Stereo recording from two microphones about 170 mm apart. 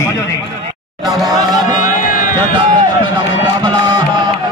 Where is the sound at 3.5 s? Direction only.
25° right (ahead or behind).